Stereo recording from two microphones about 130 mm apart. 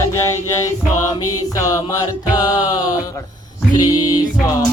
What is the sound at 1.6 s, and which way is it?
Music, 25° left (ahead or behind).